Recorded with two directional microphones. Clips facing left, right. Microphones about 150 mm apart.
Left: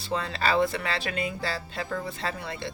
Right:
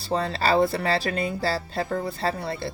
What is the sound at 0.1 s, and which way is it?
Speech, 35° right (ahead or behind).